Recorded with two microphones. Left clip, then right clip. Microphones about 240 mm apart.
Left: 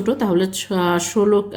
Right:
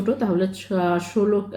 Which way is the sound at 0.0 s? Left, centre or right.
Left.